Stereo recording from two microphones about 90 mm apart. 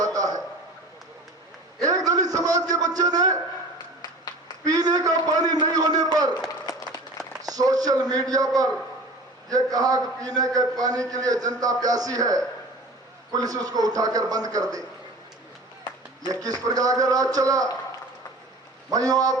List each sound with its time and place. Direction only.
0.0 s a sound: 40° right (ahead or behind)
1.8 s a sound: 40° right (ahead or behind)
4.6 s a man's voice: 45° right (ahead or behind)
6.5 s run: 45° left (ahead or behind)
7.4 s a man's voice: 45° right (ahead or behind)
16.2 s a man's voice: 45° right (ahead or behind)
18.9 s a man's voice: 45° right (ahead or behind)